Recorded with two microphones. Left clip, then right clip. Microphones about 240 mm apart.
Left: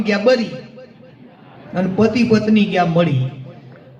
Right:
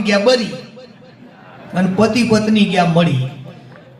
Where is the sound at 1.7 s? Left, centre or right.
Right.